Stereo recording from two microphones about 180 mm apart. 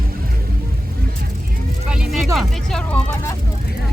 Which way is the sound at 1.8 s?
5° right (ahead or behind).